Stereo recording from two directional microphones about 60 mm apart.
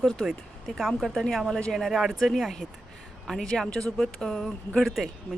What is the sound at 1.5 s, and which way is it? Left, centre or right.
Speech, centre.